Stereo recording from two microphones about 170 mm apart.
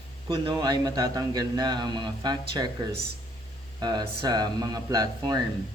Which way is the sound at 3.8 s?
25° right (ahead or behind).